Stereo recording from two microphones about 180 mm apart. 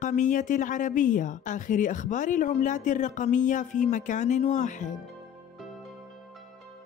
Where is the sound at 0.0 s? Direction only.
45° left (ahead or behind).